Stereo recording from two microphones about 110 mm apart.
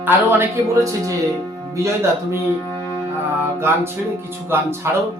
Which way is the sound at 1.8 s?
25° right (ahead or behind).